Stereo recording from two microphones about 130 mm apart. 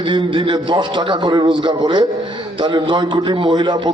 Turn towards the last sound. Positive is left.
turn(degrees=-35)  # may be behind; listen again after turning